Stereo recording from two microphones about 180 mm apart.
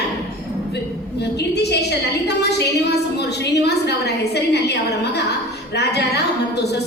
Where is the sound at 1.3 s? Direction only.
65° left (ahead or behind).